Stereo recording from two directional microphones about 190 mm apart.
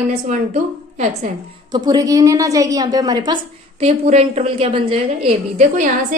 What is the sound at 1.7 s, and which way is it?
A woman's voice, 20° right (ahead or behind).